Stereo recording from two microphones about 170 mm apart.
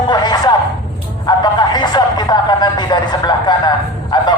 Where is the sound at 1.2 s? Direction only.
25° left (ahead or behind).